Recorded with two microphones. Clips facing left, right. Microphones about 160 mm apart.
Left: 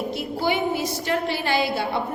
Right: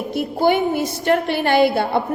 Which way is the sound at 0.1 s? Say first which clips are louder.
Right 11 dB; 50° right (ahead or behind).